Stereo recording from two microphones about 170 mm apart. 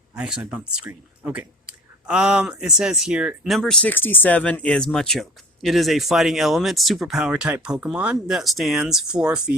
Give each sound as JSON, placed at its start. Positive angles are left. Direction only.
{"t": 0.5, "sound": "speech", "side_deg": -10}